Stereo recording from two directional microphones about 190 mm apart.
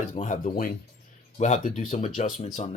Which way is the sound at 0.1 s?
40° left (ahead or behind).